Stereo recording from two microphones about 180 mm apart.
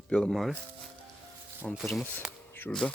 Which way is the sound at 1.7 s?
Centre (ahead or behind).